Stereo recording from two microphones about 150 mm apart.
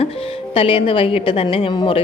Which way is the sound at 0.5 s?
40° left (ahead or behind).